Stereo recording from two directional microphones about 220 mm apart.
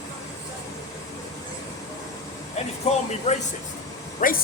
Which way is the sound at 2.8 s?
30° left (ahead or behind).